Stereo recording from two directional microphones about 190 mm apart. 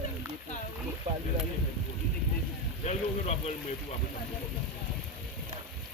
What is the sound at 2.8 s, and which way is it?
Speech, 35° left (ahead or behind).